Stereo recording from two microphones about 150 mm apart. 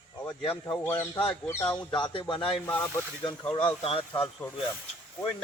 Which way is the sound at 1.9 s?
35° left (ahead or behind).